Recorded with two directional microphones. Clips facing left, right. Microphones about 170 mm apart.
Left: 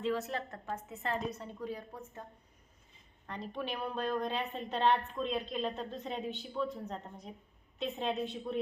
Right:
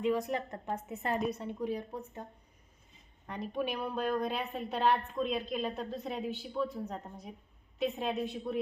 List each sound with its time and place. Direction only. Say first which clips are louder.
0.0 s a woman's voice: right 3 dB; 15° right (ahead or behind)
3.2 s a woman's voice: right 4 dB; 15° right (ahead or behind)